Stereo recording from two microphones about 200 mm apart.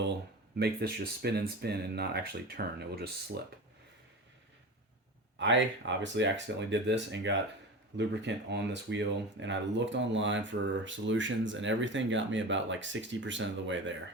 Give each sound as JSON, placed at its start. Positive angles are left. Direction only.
{"t": 0.6, "sound": "speech", "side_deg": -50}
{"t": 5.4, "sound": "speech", "side_deg": -65}